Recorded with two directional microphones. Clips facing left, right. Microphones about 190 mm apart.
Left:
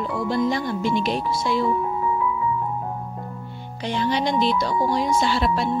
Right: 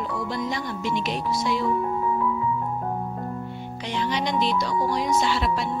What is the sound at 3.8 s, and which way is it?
Speech, 35° left (ahead or behind).